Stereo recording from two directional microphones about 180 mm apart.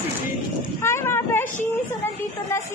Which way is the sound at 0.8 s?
15° left (ahead or behind).